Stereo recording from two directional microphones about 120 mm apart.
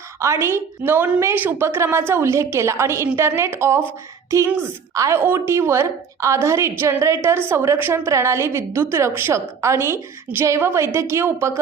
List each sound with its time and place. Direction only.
0.2 s a woman's voice: 25° right (ahead or behind)
4.9 s a woman's voice: 25° right (ahead or behind)